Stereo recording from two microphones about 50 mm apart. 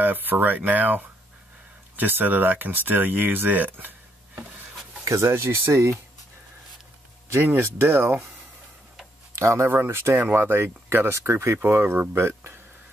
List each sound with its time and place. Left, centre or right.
0.0 s speech: right
5.0 s speech: right
7.3 s speech: right
9.3 s speech: right
10.3 s speech: right
11.2 s speech: right
11.6 s speech: right